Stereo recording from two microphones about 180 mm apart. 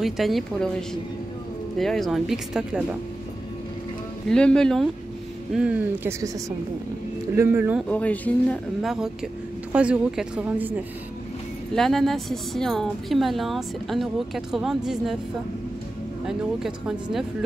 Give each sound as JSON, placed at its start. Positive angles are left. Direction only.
{"t": 0.0, "sound": "speech", "side_deg": 0}
{"t": 4.3, "sound": "a woman's voice", "side_deg": 5}
{"t": 7.3, "sound": "a woman's voice", "side_deg": -10}
{"t": 7.9, "sound": "a woman's voice", "side_deg": 10}
{"t": 11.7, "sound": "speech", "side_deg": 0}
{"t": 16.3, "sound": "speech", "side_deg": 0}